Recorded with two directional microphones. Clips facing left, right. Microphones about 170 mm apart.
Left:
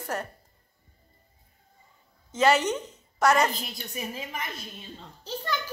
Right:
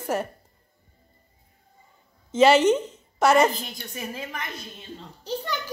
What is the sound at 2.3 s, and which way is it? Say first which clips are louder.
A woman's voice: right 6 dB; 25° right (ahead or behind).